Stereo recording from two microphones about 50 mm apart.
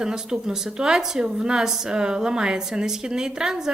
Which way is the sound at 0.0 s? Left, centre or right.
Centre.